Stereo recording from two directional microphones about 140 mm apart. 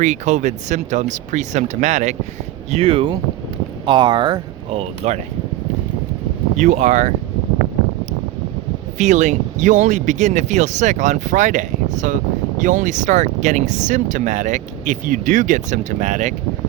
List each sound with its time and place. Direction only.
0.0 s speech: 60° right (ahead or behind)
2.6 s speech: 45° right (ahead or behind)
4.8 s speech: 50° right (ahead or behind)
6.6 s speech: 60° right (ahead or behind)
9.0 s speech: 60° right (ahead or behind)